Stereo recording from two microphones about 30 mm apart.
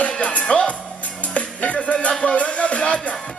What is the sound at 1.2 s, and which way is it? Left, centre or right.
Music, left.